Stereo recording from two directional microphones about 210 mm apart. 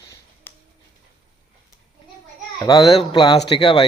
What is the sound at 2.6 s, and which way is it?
Speech, 20° left (ahead or behind).